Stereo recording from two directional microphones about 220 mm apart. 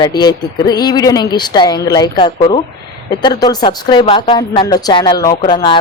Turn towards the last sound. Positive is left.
turn(degrees=20)  # may be behind; listen again after turning